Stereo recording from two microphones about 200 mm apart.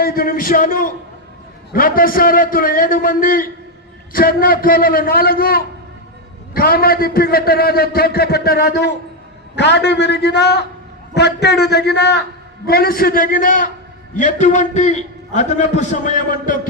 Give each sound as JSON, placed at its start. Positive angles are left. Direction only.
{"t": 0.0, "sound": "a man's voice", "side_deg": 45}